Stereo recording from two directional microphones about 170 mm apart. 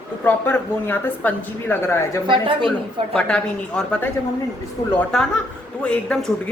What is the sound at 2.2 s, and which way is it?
Speech, 30° right (ahead or behind).